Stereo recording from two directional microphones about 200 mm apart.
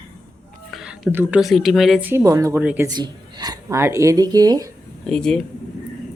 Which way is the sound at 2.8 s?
20° right (ahead or behind).